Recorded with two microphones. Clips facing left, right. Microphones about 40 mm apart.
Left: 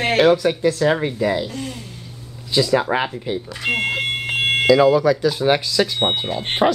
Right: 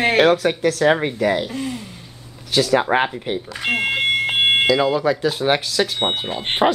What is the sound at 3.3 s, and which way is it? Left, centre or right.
Speech, right.